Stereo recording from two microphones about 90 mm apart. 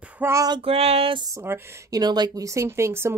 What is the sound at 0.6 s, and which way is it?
Child singing, 90° right.